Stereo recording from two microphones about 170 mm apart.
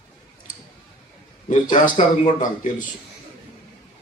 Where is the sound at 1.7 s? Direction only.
50° left (ahead or behind).